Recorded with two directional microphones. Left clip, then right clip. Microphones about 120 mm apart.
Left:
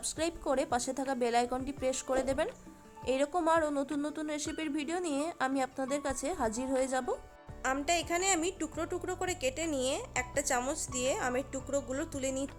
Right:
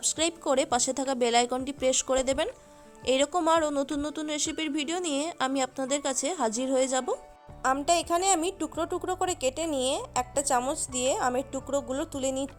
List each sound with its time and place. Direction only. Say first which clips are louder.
0.0 s a woman's voice: right 6 dB; 45° right (ahead or behind)
7.6 s a woman's voice: right 6 dB; 25° right (ahead or behind)